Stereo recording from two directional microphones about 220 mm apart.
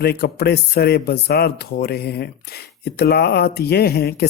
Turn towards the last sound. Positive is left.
turn(degrees=45)  # may be behind; listen again after turning